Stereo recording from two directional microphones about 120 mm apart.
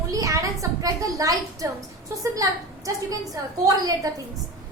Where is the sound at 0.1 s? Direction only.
30° right (ahead or behind).